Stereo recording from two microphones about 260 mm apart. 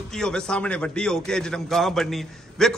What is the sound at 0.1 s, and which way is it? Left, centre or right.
A man's voice, centre.